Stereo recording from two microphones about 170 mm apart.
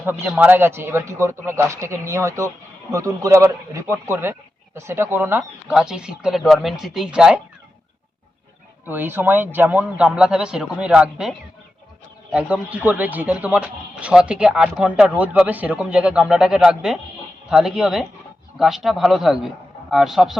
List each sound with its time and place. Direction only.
0.0 s speech: 10° right (ahead or behind)
8.9 s speech: 10° right (ahead or behind)